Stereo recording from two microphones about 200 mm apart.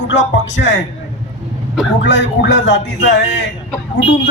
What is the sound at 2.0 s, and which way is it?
A man's voice, 65° left (ahead or behind).